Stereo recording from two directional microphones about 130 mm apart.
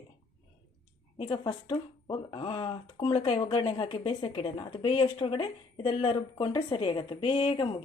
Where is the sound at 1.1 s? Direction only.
45° left (ahead or behind).